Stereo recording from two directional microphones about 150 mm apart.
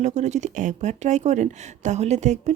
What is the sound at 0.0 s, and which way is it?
Speech, 50° right (ahead or behind).